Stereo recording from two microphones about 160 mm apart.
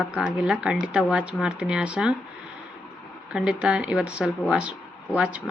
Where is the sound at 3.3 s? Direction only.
5° right (ahead or behind).